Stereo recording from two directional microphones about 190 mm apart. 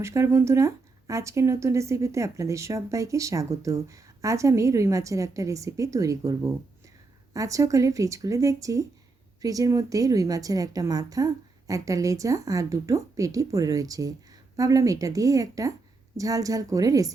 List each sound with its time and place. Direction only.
0.0 s speech: 15° right (ahead or behind)